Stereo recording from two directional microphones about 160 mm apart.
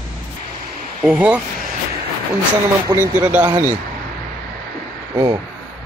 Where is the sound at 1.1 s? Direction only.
10° right (ahead or behind).